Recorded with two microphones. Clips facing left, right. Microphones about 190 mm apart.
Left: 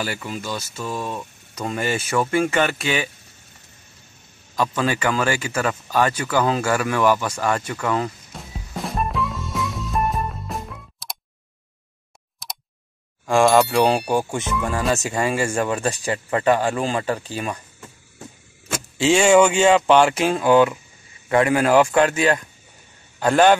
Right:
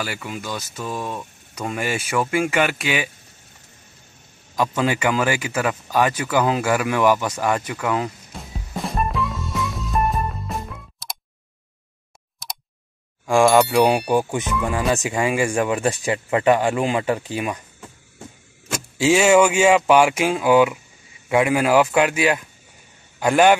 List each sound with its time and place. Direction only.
0.0 s speech: 5° right (ahead or behind)
4.6 s speech: 15° right (ahead or behind)
8.3 s music: centre (ahead or behind)
12.4 s a sound: centre (ahead or behind)
13.5 s speech: centre (ahead or behind)
14.9 s speech: 15° right (ahead or behind)
18.9 s a man's voice: 5° right (ahead or behind)